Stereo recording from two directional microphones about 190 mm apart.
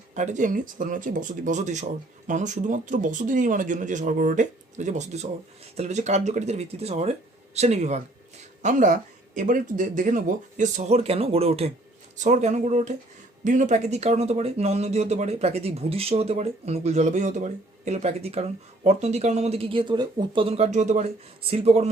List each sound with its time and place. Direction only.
0.1 s speech: 40° right (ahead or behind)